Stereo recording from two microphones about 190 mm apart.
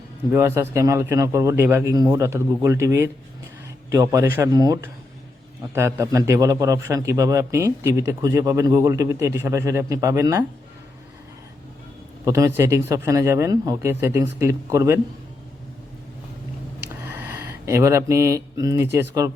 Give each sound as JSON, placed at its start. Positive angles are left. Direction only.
{"t": 0.3, "sound": "a man's voice", "side_deg": -15}
{"t": 12.2, "sound": "a man's voice", "side_deg": -15}
{"t": 17.0, "sound": "speech", "side_deg": -10}